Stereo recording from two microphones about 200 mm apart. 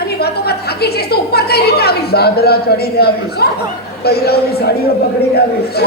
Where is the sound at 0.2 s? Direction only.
50° left (ahead or behind).